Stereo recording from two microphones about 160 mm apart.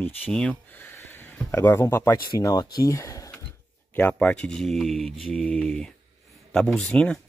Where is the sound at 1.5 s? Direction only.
15° left (ahead or behind).